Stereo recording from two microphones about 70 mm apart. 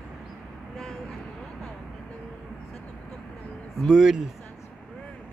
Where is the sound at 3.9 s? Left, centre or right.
Centre.